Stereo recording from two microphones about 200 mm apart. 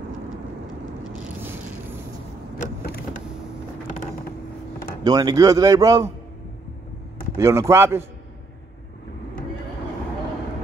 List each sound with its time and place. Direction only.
1.2 s a sound: 10° right (ahead or behind)
2.6 s vehicle: 45° left (ahead or behind)
5.0 s speech: 20° right (ahead or behind)
7.3 s speech: 15° right (ahead or behind)